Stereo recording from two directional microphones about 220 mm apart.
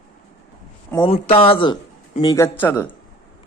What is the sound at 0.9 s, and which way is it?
A man's voice, 25° left (ahead or behind).